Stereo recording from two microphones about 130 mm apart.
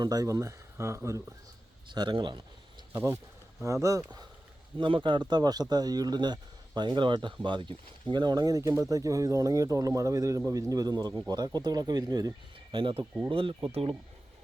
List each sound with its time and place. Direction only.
0.0 s speech: 30° right (ahead or behind)
1.9 s speech: 35° right (ahead or behind)
2.9 s speech: 20° right (ahead or behind)
4.8 s speech: 40° right (ahead or behind)